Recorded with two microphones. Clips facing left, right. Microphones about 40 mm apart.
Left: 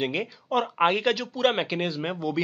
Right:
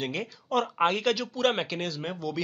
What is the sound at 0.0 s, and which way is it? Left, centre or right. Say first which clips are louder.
Speech: left 4 dB; centre.